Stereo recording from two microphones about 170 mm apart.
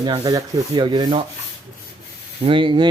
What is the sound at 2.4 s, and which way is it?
Rub, 30° right (ahead or behind).